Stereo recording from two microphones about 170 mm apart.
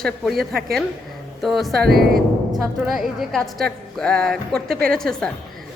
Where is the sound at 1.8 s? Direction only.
65° right (ahead or behind).